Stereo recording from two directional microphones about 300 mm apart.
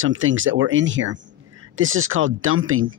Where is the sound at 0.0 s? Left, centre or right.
Right.